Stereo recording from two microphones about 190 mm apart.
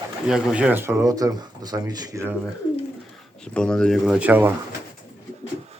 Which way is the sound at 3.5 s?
5° left (ahead or behind).